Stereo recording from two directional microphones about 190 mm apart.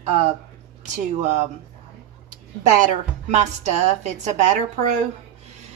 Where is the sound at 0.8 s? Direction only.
40° right (ahead or behind).